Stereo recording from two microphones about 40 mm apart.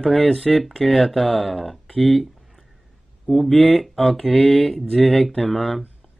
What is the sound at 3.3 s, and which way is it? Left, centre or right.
Speech, centre.